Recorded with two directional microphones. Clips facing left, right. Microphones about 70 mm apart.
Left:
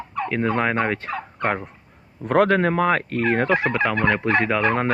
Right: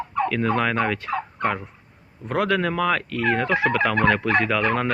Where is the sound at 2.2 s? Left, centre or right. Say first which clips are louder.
Left 6 dB; left.